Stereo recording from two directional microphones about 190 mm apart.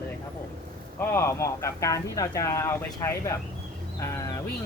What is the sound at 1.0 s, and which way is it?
Speech, 15° left (ahead or behind).